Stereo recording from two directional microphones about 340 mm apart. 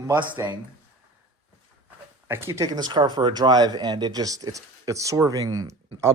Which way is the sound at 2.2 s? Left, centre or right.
Centre.